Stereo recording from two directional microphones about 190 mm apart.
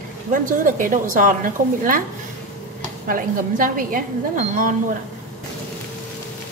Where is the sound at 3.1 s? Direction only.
45° right (ahead or behind).